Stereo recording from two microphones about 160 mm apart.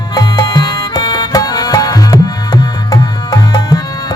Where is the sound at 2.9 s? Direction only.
25° left (ahead or behind).